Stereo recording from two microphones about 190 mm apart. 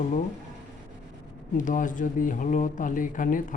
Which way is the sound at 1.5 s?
45° left (ahead or behind).